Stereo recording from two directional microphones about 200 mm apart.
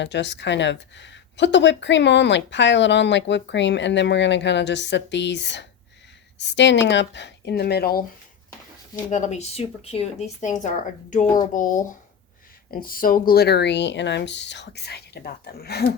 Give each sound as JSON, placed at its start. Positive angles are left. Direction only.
{"t": 0.0, "sound": "speech", "side_deg": 60}
{"t": 9.0, "sound": "speech", "side_deg": 35}
{"t": 12.7, "sound": "speech", "side_deg": 45}